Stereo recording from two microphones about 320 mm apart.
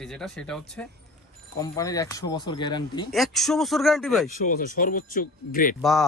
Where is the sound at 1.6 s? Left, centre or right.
Centre.